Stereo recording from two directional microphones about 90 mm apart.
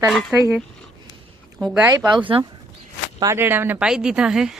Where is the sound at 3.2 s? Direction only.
30° right (ahead or behind).